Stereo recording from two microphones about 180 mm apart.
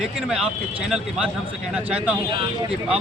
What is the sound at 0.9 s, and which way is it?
Speech, 5° right (ahead or behind).